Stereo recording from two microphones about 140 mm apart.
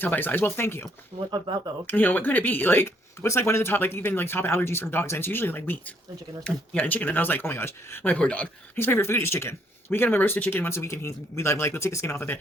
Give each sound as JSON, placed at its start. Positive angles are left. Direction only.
{"t": 0.0, "sound": "speech", "side_deg": 15}
{"t": 1.1, "sound": "speech", "side_deg": -35}
{"t": 1.9, "sound": "speech", "side_deg": 15}